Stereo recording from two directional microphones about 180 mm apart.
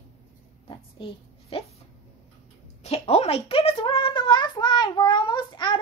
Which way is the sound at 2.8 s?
35° left (ahead or behind).